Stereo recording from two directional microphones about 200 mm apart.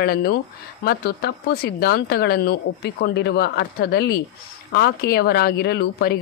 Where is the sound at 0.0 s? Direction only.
50° left (ahead or behind).